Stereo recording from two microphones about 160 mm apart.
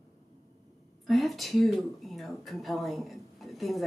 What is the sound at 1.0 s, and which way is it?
Speech, centre (ahead or behind).